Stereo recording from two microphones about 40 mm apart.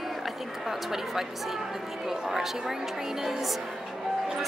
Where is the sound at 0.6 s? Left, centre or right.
Centre.